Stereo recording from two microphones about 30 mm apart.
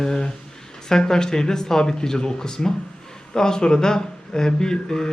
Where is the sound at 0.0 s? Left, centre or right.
Left.